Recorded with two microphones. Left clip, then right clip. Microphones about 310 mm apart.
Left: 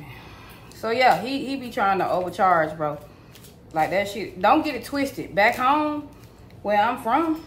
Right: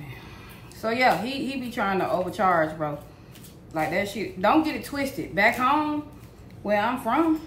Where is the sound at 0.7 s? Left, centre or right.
Centre.